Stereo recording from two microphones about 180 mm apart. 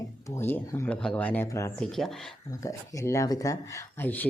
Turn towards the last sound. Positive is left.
turn(degrees=10)  # may be behind; listen again after turning